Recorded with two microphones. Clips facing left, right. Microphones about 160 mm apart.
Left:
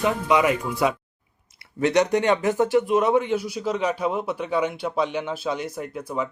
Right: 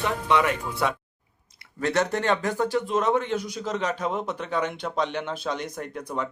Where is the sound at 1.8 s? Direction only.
15° left (ahead or behind).